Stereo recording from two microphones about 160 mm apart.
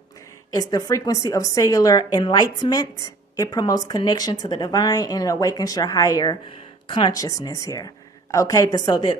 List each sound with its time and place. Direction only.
0.5 s a woman's voice: 20° left (ahead or behind)